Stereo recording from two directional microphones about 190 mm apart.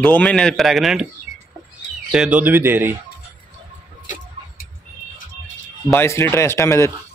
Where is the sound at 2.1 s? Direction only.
5° right (ahead or behind).